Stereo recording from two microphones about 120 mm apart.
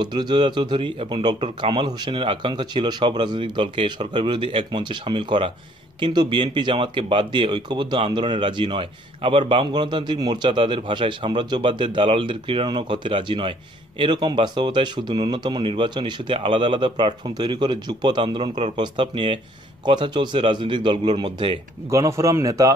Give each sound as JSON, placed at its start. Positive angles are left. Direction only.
{"t": 0.0, "sound": "speech", "side_deg": -35}
{"t": 21.9, "sound": "speech", "side_deg": -25}